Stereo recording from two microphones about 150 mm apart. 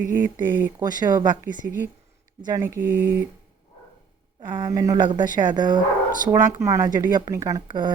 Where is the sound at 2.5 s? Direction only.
20° right (ahead or behind).